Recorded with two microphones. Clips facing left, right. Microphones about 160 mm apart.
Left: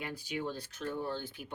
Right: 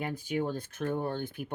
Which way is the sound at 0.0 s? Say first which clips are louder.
Right 6 dB; 50° right (ahead or behind).